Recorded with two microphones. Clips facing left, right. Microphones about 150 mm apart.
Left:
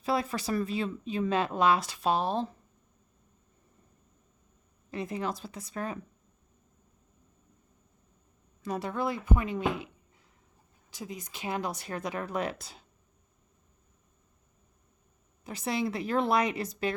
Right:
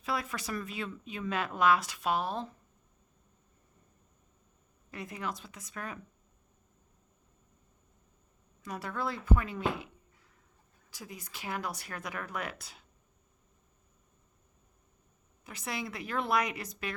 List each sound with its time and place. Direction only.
0.0 s speech: 30° left (ahead or behind)
4.9 s speech: 30° left (ahead or behind)
8.6 s speech: 25° left (ahead or behind)
10.9 s speech: 20° left (ahead or behind)
15.4 s speech: 30° left (ahead or behind)